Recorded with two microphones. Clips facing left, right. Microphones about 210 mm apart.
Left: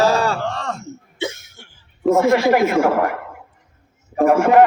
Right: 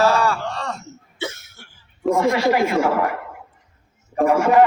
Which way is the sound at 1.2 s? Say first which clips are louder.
Left 3 dB; 15° left (ahead or behind).